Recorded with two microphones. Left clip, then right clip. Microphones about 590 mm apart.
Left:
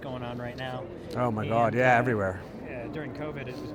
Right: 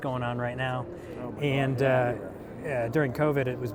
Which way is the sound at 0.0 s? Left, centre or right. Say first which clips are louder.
Right 5 dB; right.